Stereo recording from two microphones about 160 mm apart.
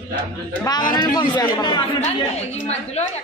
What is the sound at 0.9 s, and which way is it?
Speech, 25° left (ahead or behind).